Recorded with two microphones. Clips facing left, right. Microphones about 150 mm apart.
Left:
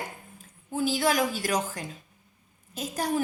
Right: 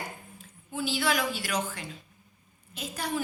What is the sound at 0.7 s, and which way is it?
A woman's voice, 45° left (ahead or behind).